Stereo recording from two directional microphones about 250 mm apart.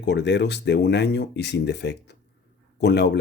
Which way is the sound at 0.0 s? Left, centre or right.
Left.